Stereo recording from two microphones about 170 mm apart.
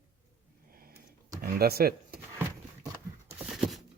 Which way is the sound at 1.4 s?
65° right (ahead or behind).